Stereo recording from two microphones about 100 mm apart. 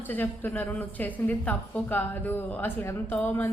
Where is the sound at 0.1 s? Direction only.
20° left (ahead or behind).